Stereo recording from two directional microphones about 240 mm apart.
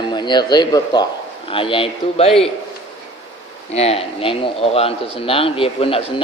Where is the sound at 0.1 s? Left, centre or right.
Centre.